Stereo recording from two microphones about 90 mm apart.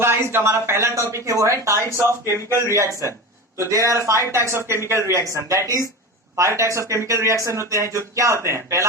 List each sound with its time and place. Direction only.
0.0 s speech: 30° right (ahead or behind)